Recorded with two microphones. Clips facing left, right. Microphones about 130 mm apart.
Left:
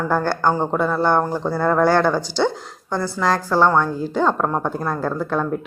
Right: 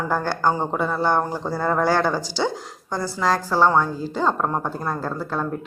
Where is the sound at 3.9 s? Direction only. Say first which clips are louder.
Left 4 dB; 55° left (ahead or behind).